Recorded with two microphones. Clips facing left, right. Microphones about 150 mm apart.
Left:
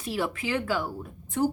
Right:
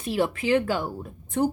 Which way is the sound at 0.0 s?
25° right (ahead or behind).